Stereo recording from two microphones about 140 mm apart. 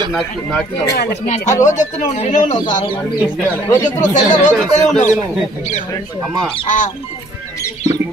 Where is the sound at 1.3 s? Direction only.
60° left (ahead or behind).